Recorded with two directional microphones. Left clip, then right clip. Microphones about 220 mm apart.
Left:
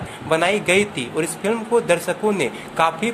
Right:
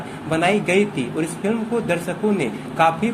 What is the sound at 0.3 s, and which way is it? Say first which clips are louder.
Speech: left 1 dB; 25° left (ahead or behind).